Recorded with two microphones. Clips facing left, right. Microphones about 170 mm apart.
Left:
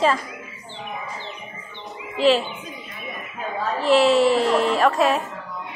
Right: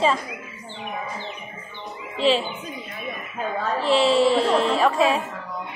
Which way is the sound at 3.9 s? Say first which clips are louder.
Left 2 dB; 30° right (ahead or behind).